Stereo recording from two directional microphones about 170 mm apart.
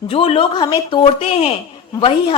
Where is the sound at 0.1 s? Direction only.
30° left (ahead or behind).